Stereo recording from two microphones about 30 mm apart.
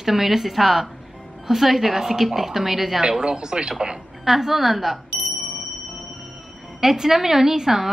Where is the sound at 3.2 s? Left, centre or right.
Right.